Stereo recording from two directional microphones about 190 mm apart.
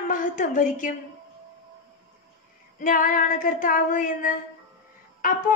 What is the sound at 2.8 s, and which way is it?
A woman's voice, 45° left (ahead or behind).